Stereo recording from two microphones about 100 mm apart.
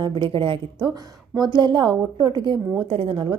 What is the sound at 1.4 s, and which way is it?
A woman's voice, 50° right (ahead or behind).